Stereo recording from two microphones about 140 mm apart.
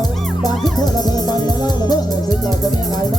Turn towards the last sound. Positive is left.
turn(degrees=30)  # may be behind; listen again after turning